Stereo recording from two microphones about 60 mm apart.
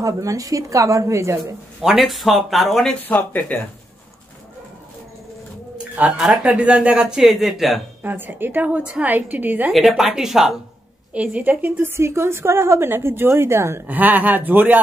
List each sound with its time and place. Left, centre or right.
0.0 s a woman's voice: right
1.8 s speech: centre
3.1 s speech: left
5.9 s speech: centre
8.0 s a woman's voice: right
9.7 s speech: centre
11.1 s a woman's voice: right
13.8 s speech: right